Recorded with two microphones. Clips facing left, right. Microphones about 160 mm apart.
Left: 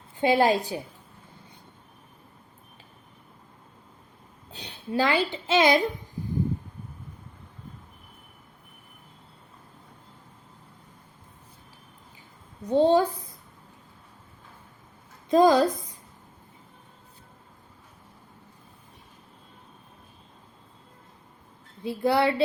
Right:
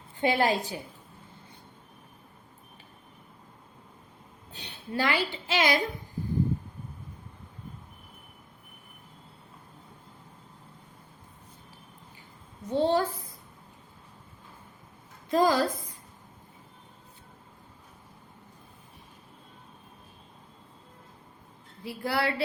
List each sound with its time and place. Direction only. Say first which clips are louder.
0.2 s a woman's voice: left 4 dB; 20° left (ahead or behind)
4.5 s a woman's voice: left 5 dB; 10° left (ahead or behind)
12.6 s a woman's voice: left 5 dB; 15° left (ahead or behind)
15.3 s a woman's voice: left 5 dB; 20° left (ahead or behind)
21.8 s a woman's voice: left 6 dB; 20° left (ahead or behind)